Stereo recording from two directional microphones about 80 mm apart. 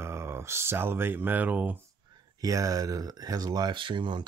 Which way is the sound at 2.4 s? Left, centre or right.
Right.